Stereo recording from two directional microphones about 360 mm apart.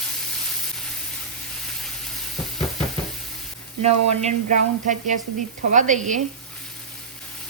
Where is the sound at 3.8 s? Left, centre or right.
Centre.